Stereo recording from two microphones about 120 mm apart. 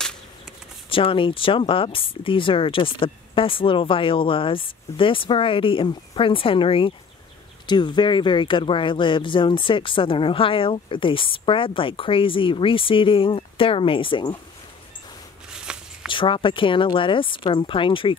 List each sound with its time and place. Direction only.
0.8 s speech: 50° left (ahead or behind)
15.6 s shuffling cards: 5° right (ahead or behind)
16.1 s speech: 45° left (ahead or behind)